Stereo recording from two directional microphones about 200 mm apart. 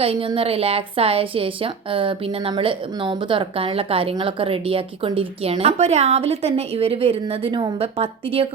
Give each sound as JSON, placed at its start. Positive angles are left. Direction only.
{"t": 0.0, "sound": "a woman's voice", "side_deg": -25}